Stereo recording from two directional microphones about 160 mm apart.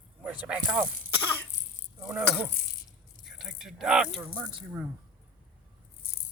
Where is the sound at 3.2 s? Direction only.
5° right (ahead or behind).